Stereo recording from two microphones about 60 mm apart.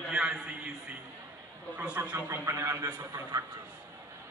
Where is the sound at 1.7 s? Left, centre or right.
Right.